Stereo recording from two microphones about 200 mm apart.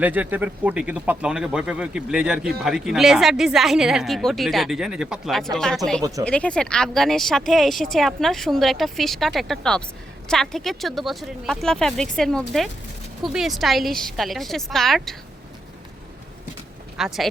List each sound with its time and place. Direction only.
0.0 s speech: 10° right (ahead or behind)
6.0 s speech: 15° right (ahead or behind)
6.2 s speech: 5° left (ahead or behind)
17.0 s speech: centre (ahead or behind)